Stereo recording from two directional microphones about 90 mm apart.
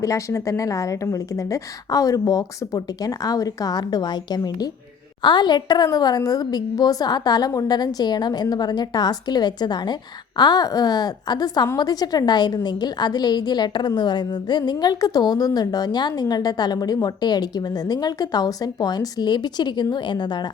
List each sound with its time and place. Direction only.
0.0 s a woman's voice: 35° left (ahead or behind); by 20.5 s 55° left (ahead or behind)